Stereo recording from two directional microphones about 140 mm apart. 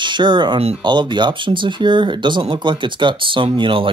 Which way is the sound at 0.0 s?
35° right (ahead or behind).